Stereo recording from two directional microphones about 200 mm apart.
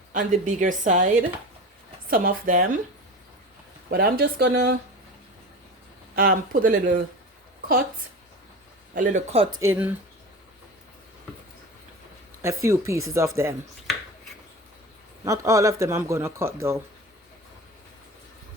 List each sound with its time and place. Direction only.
0.1 s a woman's voice: 40° right (ahead or behind)
3.8 s speech: 50° right (ahead or behind)
6.1 s speech: 45° right (ahead or behind)
9.0 s a woman's voice: 35° right (ahead or behind)
9.6 s speech: 10° right (ahead or behind)
12.4 s speech: 15° right (ahead or behind)
15.2 s speech: 15° right (ahead or behind)